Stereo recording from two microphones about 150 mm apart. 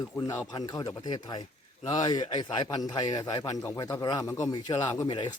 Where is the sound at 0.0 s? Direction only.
25° left (ahead or behind).